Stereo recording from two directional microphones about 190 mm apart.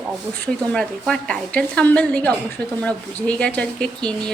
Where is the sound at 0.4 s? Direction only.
5° left (ahead or behind).